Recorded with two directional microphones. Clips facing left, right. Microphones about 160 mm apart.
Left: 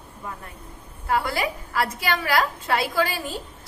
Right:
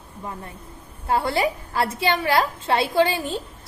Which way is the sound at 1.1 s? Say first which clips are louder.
Right 3 dB; 25° right (ahead or behind).